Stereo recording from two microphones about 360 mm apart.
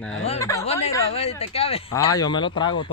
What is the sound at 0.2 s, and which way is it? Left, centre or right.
Speech, centre.